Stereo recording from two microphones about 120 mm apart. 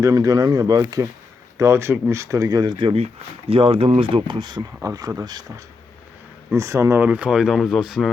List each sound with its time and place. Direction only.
0.0 s speech: 30° right (ahead or behind)
4.8 s speech: 30° right (ahead or behind)
7.0 s speech: 10° right (ahead or behind)